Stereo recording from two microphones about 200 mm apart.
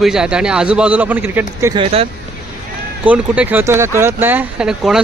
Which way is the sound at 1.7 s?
30° right (ahead or behind).